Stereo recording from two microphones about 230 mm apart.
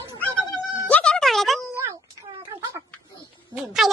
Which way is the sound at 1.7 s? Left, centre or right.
Centre.